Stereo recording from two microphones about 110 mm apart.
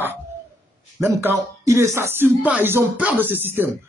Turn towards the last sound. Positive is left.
turn(degrees=-20)  # may be behind; listen again after turning